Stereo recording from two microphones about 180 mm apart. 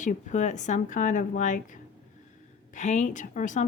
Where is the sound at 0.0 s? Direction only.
45° left (ahead or behind).